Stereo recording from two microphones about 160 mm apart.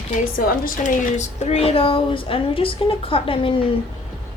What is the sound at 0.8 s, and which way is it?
A woman's voice, 45° left (ahead or behind).